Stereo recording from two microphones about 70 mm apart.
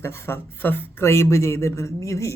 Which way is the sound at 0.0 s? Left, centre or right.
Left.